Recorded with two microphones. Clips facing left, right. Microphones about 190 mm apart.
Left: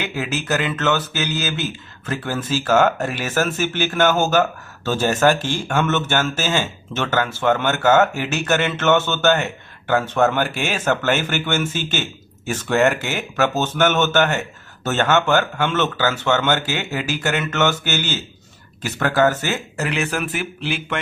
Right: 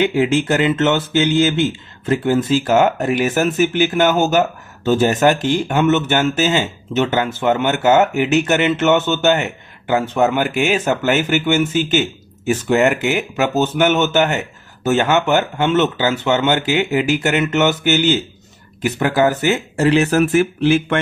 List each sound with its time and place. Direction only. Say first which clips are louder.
0.0 s speech: right 10 dB; 25° right (ahead or behind)
19.5 s speech: right 9 dB; 30° right (ahead or behind)